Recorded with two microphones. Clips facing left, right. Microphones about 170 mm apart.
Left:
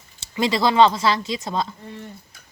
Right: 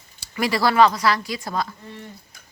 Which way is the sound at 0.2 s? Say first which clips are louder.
Left 1 dB; 25° left (ahead or behind).